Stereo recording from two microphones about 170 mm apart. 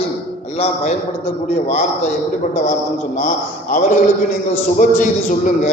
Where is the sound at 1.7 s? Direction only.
40° left (ahead or behind).